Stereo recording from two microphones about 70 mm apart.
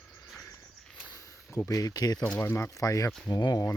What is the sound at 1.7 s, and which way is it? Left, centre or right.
Speech, left.